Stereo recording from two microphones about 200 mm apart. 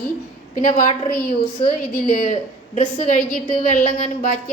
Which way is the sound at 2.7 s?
40° left (ahead or behind).